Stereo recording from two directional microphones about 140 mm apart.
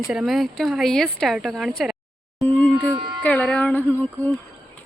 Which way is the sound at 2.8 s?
35° right (ahead or behind).